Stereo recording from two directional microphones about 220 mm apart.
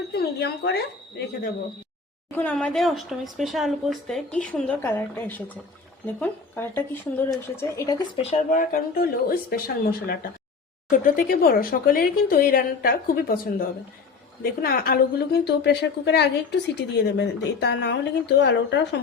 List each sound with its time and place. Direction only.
0.1 s speech: 50° left (ahead or behind)
2.3 s speech: 5° left (ahead or behind)
8.1 s speech: 30° left (ahead or behind)
8.7 s a woman's voice: 40° left (ahead or behind)